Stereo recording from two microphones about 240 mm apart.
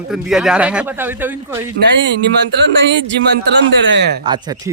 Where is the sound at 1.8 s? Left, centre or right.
Right.